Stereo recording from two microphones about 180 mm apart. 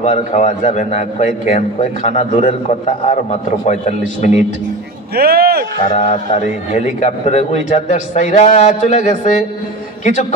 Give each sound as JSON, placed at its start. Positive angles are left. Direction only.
{"t": 0.0, "sound": "a man's voice", "side_deg": 40}
{"t": 5.1, "sound": "speech", "side_deg": -60}
{"t": 5.9, "sound": "a man's voice", "side_deg": 45}